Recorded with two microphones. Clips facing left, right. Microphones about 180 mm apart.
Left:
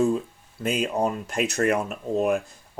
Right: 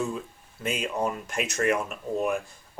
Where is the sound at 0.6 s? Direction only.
35° left (ahead or behind).